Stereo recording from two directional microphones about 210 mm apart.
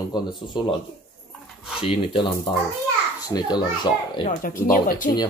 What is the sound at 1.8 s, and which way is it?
A child's voice, 25° left (ahead or behind).